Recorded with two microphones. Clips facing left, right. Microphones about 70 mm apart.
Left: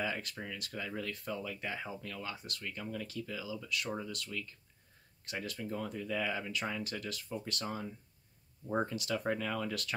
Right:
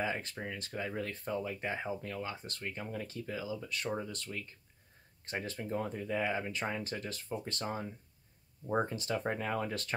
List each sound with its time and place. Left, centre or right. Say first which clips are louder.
0.0 s speech: right 2 dB; right